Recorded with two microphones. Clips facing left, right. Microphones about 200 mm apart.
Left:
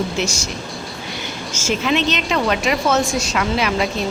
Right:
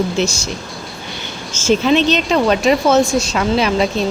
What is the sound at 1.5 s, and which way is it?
Speech, 30° right (ahead or behind).